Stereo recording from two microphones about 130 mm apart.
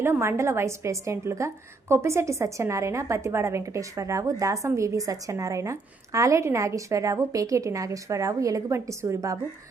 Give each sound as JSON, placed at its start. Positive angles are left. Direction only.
{"t": 0.0, "sound": "a woman's voice", "side_deg": -20}